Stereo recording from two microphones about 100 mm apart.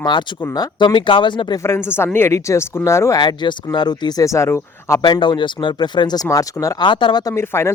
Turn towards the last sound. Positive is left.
turn(degrees=25)  # may be behind; listen again after turning